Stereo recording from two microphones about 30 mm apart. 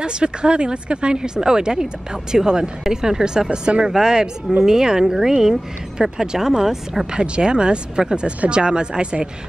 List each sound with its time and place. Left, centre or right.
0.0 s speech: right
3.7 s speech: right
4.0 s speech: right
7.2 s speech: right